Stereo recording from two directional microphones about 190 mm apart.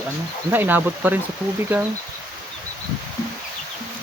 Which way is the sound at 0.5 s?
10° right (ahead or behind).